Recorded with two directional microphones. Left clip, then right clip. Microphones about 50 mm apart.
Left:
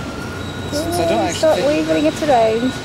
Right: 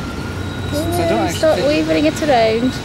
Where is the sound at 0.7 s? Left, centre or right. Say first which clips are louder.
Even; centre.